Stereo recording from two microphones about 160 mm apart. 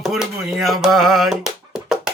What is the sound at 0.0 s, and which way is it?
Speech, centre (ahead or behind).